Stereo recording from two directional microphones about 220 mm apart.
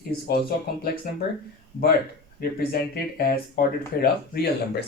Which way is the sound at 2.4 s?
45° left (ahead or behind).